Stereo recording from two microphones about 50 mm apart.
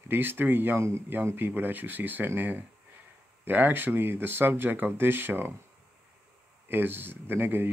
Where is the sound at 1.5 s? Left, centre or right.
Right.